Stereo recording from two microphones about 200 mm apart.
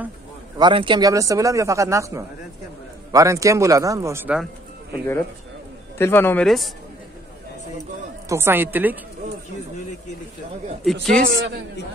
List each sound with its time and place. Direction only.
0.6 s speech: 25° right (ahead or behind)
5.9 s a man's voice: 10° left (ahead or behind)
8.3 s speech: 10° right (ahead or behind)
10.8 s speech: centre (ahead or behind)
11.2 s a man's voice: 60° right (ahead or behind)